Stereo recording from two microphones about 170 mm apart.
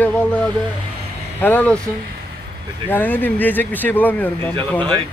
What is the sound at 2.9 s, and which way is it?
Speech, 10° left (ahead or behind).